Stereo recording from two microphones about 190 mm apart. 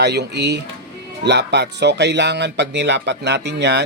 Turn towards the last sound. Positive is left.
turn(degrees=-65)  # may be behind; listen again after turning